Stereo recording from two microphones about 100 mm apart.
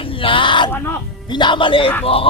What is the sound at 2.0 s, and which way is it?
Speech, 70° left (ahead or behind).